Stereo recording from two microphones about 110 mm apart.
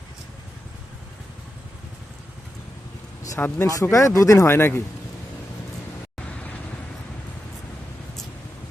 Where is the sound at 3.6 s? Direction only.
30° left (ahead or behind).